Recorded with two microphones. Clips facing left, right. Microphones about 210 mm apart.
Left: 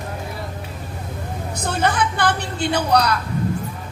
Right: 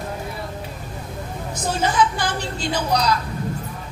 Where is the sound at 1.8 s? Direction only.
60° left (ahead or behind).